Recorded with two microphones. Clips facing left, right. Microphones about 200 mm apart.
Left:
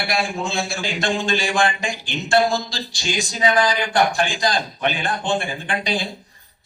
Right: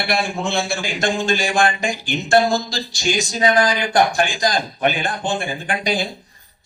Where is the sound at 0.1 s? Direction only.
65° right (ahead or behind).